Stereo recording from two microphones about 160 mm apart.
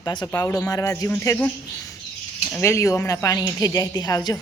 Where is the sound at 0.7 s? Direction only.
20° left (ahead or behind).